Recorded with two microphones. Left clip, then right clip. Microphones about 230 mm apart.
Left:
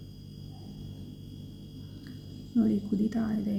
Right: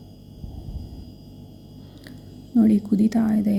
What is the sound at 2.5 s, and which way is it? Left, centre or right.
Speech, right.